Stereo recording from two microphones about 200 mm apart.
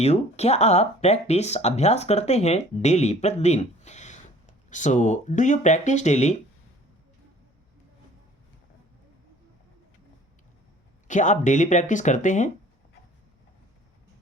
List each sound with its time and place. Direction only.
0.0 s speech: 30° left (ahead or behind)
11.1 s speech: 40° left (ahead or behind)